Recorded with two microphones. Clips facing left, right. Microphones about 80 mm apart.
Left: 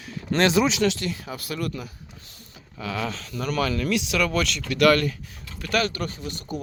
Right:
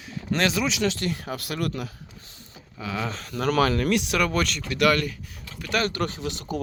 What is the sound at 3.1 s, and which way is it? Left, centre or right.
Speech, right.